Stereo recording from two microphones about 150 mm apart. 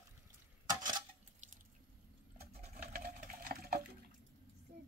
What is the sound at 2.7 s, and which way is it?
Sewing machine, 85° right.